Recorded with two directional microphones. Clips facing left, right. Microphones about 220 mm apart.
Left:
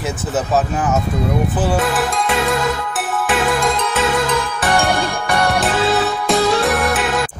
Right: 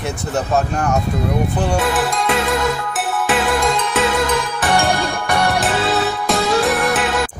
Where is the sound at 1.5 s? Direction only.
5° left (ahead or behind).